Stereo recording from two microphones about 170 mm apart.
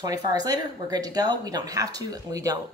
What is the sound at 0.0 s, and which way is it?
Speech, 20° right (ahead or behind).